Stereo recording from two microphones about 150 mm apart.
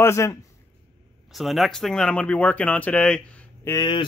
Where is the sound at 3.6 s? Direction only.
25° left (ahead or behind).